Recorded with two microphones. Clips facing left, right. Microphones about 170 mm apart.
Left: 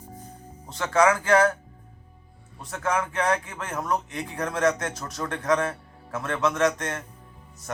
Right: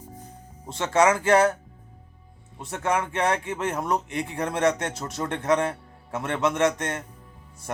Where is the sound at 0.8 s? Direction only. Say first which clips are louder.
Right 1 dB; 25° right (ahead or behind).